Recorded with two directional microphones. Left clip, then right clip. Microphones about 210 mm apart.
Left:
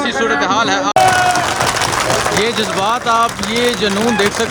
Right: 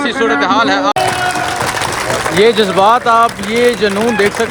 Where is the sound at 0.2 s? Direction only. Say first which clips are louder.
Right 3 dB; 5° left (ahead or behind).